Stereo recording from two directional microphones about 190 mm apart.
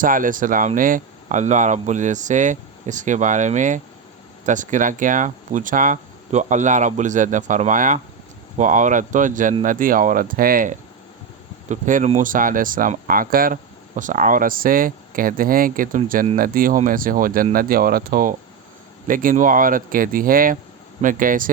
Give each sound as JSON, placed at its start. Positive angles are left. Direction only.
{"t": 0.0, "sound": "speech", "side_deg": -45}